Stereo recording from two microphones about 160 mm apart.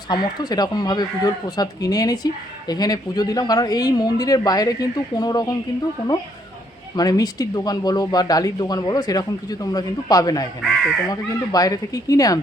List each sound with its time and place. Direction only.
0.1 s speech: 25° left (ahead or behind)
6.9 s speech: 25° left (ahead or behind)